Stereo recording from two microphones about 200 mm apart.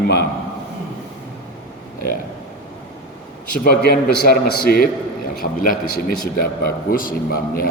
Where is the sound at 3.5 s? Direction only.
50° left (ahead or behind).